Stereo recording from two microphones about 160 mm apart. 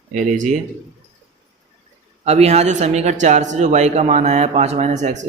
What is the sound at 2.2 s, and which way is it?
Speech, 45° right (ahead or behind).